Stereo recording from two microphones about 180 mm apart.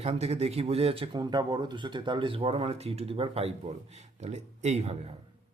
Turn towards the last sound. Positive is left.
turn(degrees=-35)  # may be behind; listen again after turning